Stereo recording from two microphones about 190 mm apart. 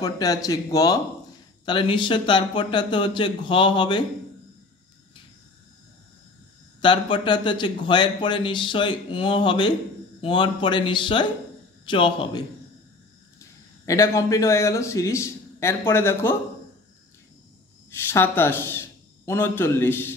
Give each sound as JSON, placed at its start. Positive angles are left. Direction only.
{"t": 0.0, "sound": "a man's voice", "side_deg": 20}
{"t": 6.8, "sound": "a man's voice", "side_deg": 25}
{"t": 17.9, "sound": "speech", "side_deg": 10}